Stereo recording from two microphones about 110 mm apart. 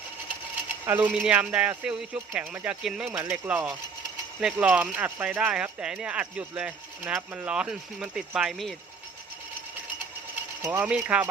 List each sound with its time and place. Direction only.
0.9 s speech: 15° right (ahead or behind)
3.1 s speech: 15° right (ahead or behind); by 8.7 s centre (ahead or behind)
10.6 s mechanisms: 20° right (ahead or behind)
10.8 s speech: 10° right (ahead or behind)